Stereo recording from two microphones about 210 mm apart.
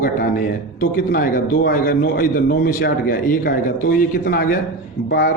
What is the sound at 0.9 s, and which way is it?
A man's voice, 45° left (ahead or behind).